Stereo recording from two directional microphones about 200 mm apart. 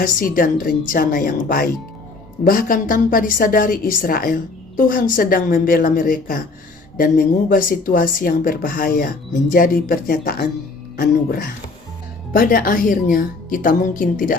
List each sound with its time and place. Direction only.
0.0 s speech: 45° left (ahead or behind)